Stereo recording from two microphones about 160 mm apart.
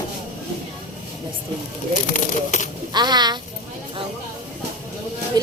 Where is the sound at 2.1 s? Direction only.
50° left (ahead or behind).